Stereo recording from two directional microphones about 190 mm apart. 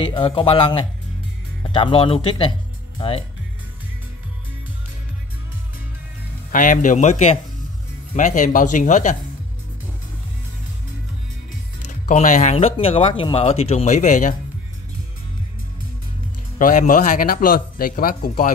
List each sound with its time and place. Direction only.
0.0 s speech: 25° left (ahead or behind)
6.5 s speech: 45° left (ahead or behind)
12.1 s speech: 40° left (ahead or behind)
16.5 s a man's voice: 45° left (ahead or behind)